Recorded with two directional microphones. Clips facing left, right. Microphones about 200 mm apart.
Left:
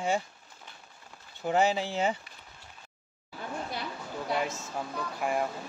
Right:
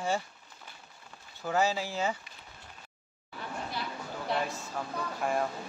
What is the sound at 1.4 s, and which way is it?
Speech, 20° left (ahead or behind).